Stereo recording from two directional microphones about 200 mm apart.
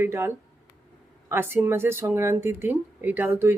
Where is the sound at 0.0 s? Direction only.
10° right (ahead or behind).